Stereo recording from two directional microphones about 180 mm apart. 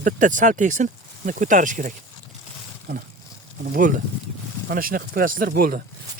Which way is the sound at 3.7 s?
45° right (ahead or behind).